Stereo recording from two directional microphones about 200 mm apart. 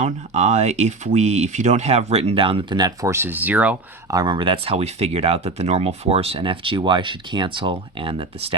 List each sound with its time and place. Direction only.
0.0 s speech: 35° right (ahead or behind); by 3.8 s 5° right (ahead or behind)
4.1 s speech: 20° right (ahead or behind)